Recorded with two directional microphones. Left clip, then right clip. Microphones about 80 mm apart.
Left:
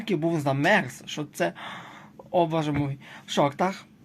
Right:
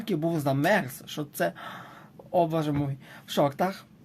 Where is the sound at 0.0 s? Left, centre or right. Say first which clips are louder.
Left 2 dB; right.